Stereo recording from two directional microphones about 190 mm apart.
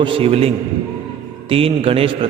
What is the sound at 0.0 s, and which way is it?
A man's voice, 30° right (ahead or behind).